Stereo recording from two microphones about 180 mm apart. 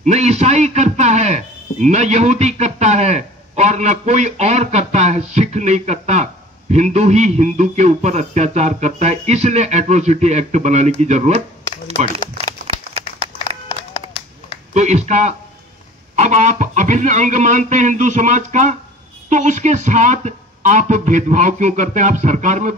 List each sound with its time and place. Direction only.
0.0 s a man's voice: 40° right (ahead or behind)
14.7 s a man's voice: 40° right (ahead or behind)